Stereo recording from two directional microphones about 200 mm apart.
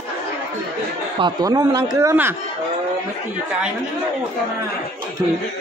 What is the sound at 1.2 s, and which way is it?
A man's voice, 20° right (ahead or behind).